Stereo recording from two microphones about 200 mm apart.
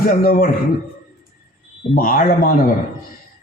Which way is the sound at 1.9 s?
45° left (ahead or behind).